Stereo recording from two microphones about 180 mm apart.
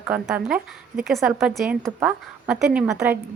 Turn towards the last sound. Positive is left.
turn(degrees=-5)  # may be behind; listen again after turning